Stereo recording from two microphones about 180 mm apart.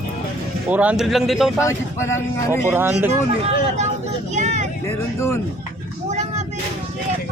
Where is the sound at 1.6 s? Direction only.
15° left (ahead or behind).